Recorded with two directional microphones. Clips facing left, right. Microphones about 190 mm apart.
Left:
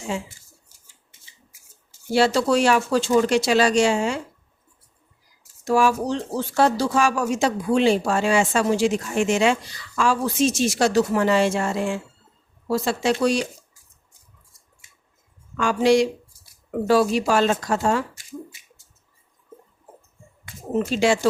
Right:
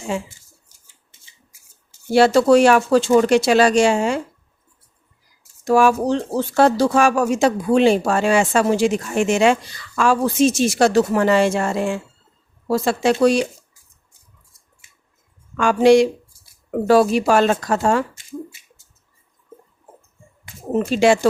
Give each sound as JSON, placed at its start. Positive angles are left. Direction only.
{"t": 2.1, "sound": "speech", "side_deg": -55}
{"t": 5.6, "sound": "speech", "side_deg": -55}
{"t": 15.5, "sound": "speech", "side_deg": -55}
{"t": 20.9, "sound": "speech", "side_deg": -55}